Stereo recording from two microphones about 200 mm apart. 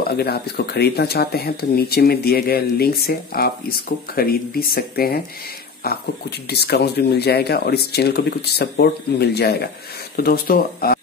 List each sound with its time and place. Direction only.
0.0 s speech: 50° left (ahead or behind)